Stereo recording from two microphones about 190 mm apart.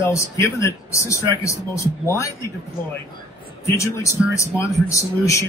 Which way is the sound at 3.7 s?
15° left (ahead or behind).